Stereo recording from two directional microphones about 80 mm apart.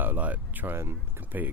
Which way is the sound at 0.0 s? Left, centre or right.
Right.